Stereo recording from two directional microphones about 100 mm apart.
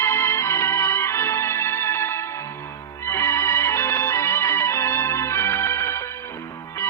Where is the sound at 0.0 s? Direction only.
25° left (ahead or behind).